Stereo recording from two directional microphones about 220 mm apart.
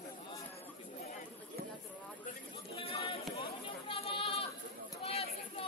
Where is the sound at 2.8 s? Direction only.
25° left (ahead or behind).